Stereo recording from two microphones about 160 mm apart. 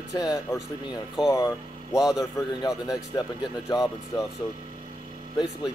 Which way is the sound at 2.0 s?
5° right (ahead or behind).